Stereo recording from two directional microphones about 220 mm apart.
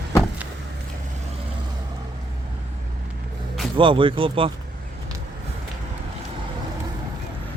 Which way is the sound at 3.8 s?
25° right (ahead or behind).